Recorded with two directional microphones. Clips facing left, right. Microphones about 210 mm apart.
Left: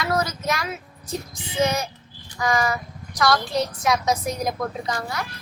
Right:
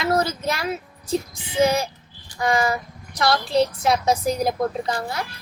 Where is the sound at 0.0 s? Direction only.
25° right (ahead or behind).